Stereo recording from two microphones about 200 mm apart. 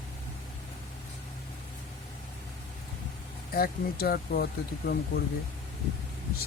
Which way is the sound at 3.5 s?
50° left (ahead or behind).